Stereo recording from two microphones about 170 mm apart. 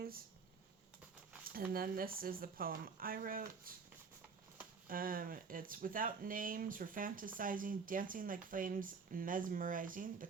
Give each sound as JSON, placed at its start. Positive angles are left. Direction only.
{"t": 1.5, "sound": "speech", "side_deg": -60}
{"t": 4.9, "sound": "speech", "side_deg": -55}